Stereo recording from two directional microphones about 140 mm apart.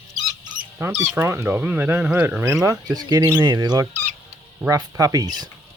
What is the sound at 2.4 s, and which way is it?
Speech, 20° right (ahead or behind).